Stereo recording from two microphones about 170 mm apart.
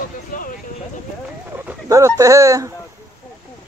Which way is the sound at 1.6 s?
20° right (ahead or behind).